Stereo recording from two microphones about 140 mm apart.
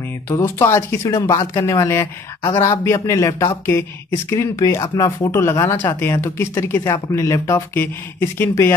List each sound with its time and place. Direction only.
0.3 s speech: 20° left (ahead or behind)